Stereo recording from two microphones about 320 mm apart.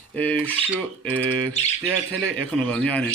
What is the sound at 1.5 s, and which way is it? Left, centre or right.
Bird, left.